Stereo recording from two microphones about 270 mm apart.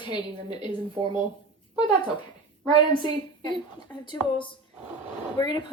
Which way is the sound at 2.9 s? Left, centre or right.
Centre.